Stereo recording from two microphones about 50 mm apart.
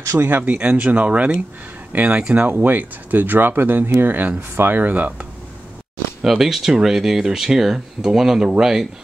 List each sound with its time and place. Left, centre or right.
0.1 s speech: right
0.4 s speech: right
2.4 s speech: right
6.2 s speech: centre